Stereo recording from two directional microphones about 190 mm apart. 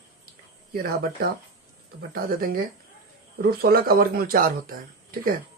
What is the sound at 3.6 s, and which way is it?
Speech, 55° right (ahead or behind).